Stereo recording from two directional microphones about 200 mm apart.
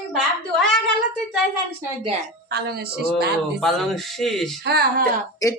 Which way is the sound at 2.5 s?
55° right (ahead or behind).